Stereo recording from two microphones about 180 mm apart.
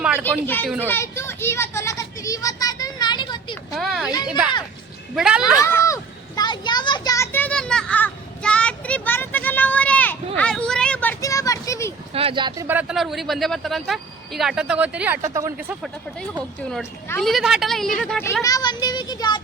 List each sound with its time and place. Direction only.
0.3 s speech: 10° left (ahead or behind)
0.9 s children playing: 15° left (ahead or behind)
3.8 s a sound: centre (ahead or behind)
5.1 s speech: 5° right (ahead or behind)
5.5 s a sound: 15° left (ahead or behind)
11.2 s a sound: 20° left (ahead or behind)
12.1 s speech: 30° right (ahead or behind)
12.6 s speech: 5° right (ahead or behind)
17.2 s speech: centre (ahead or behind)
18.4 s speech: 20° left (ahead or behind)